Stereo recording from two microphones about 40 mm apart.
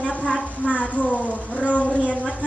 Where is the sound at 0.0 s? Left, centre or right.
Left.